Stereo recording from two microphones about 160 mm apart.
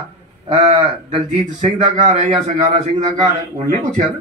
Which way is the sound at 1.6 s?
45° right (ahead or behind).